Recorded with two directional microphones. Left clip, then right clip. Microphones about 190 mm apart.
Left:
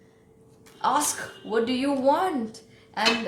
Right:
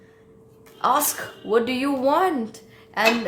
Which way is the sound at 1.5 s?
45° right (ahead or behind).